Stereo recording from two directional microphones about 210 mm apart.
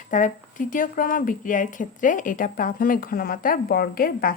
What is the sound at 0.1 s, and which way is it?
A woman's voice, 40° left (ahead or behind).